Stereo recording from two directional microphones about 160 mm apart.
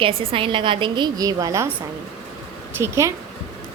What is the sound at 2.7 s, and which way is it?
Speech, 15° right (ahead or behind).